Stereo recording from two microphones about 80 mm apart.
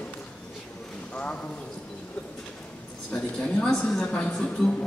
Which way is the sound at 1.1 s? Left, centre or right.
Centre.